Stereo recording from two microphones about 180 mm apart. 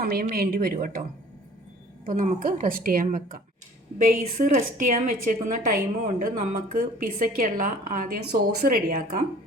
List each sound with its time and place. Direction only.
0.0 s speech: 55° right (ahead or behind)
2.0 s a woman's voice: 50° right (ahead or behind)